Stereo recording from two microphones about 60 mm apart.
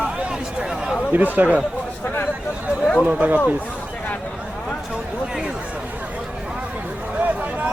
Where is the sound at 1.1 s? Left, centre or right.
Right.